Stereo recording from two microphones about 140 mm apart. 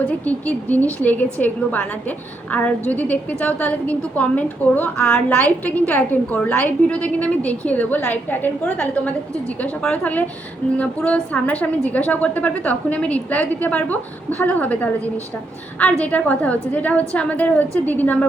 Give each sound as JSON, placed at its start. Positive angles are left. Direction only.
{"t": 0.3, "sound": "a woman's voice", "side_deg": 10}